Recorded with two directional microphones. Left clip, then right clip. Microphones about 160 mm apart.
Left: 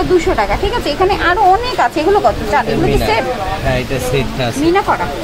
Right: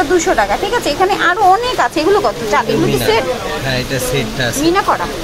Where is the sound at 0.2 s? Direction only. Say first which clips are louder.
Right 1 dB; 5° right (ahead or behind).